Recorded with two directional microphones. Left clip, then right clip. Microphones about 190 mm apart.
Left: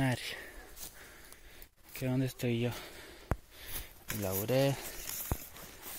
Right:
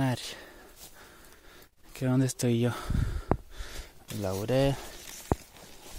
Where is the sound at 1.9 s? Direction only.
35° right (ahead or behind).